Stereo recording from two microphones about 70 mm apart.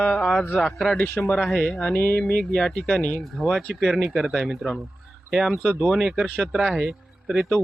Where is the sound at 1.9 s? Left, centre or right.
Left.